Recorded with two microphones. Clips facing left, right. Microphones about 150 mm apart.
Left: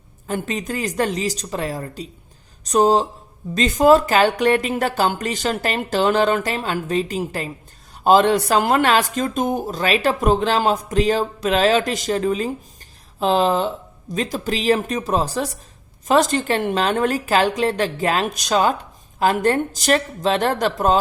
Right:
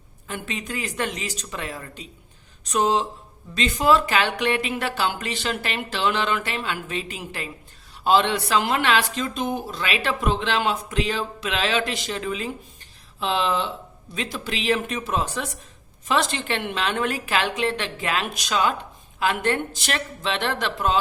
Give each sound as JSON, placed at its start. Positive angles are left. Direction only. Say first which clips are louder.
{"t": 0.3, "sound": "speech", "louder": "left 7 dB", "side_deg": 40}